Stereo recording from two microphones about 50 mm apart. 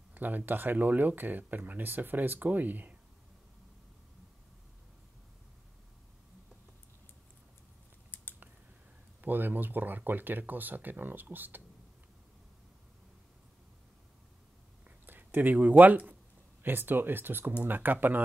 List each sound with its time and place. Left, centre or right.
0.1 s speech: right
8.1 s scissors: left
9.2 s speech: right
14.9 s a sound: right
15.8 s speech: right